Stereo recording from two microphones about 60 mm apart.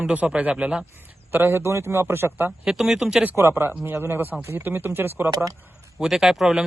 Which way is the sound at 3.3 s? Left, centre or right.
Right.